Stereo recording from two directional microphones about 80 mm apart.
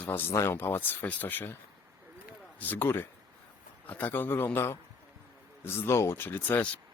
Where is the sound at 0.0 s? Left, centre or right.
Left.